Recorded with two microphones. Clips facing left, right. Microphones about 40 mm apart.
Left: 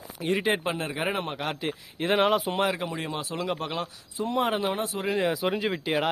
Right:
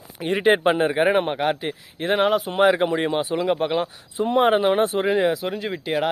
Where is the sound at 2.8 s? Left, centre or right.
Right.